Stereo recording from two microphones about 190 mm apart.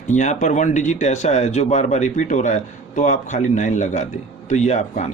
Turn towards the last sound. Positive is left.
turn(degrees=35)  # may be behind; listen again after turning